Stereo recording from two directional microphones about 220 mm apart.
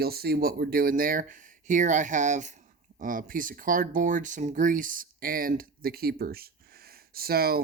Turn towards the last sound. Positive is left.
turn(degrees=-45)  # may be behind; listen again after turning